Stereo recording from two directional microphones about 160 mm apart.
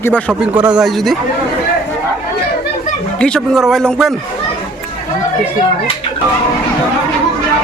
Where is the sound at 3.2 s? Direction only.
5° left (ahead or behind).